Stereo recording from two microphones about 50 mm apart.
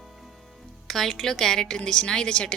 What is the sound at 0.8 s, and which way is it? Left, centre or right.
Speech, centre.